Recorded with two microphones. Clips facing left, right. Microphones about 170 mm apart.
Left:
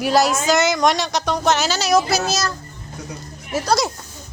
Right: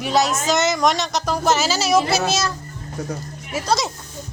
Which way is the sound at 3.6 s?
Centre (ahead or behind).